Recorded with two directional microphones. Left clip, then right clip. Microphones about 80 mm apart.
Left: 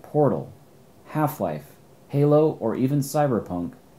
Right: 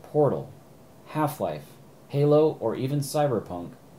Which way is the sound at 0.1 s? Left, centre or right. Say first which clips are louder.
Left 2 dB; right.